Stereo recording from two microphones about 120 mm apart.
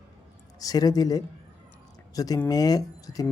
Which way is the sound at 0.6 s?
30° left (ahead or behind).